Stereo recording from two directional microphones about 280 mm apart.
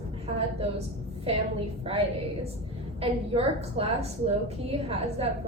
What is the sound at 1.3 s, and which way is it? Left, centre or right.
Cough, right.